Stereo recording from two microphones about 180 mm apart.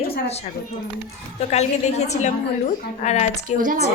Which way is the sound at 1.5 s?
40° left (ahead or behind).